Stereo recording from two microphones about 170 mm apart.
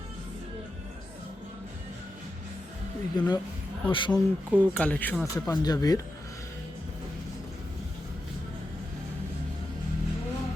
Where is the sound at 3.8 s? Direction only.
30° left (ahead or behind).